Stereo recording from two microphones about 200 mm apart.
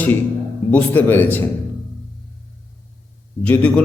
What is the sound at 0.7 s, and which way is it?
Speech, 10° left (ahead or behind).